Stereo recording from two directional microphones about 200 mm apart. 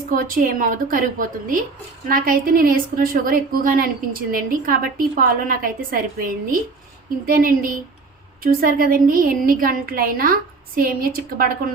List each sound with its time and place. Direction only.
0.1 s a woman's voice: 45° right (ahead or behind)
2.0 s a woman's voice: 45° right (ahead or behind)